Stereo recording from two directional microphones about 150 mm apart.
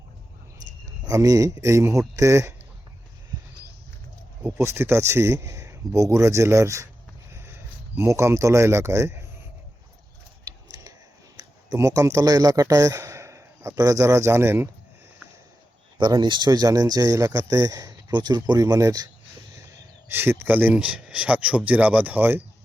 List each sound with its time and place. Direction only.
1.0 s speech: 20° right (ahead or behind)
4.4 s speech: 15° right (ahead or behind)
7.9 s speech: 20° right (ahead or behind)
10.4 s typing: 25° right (ahead or behind)
11.3 s a man's voice: 20° right (ahead or behind)
16.0 s speech: 30° right (ahead or behind)
20.1 s speech: 15° right (ahead or behind)